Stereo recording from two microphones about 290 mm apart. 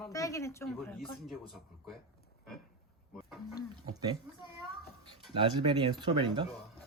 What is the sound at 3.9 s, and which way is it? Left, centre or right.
Speech, centre.